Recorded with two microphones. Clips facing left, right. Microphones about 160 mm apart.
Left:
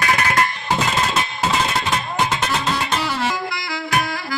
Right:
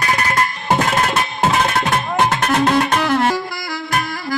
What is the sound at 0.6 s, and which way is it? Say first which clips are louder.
Music: right 4 dB; 55° right (ahead or behind).